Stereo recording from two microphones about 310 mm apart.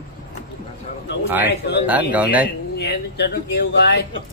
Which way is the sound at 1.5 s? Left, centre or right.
Left.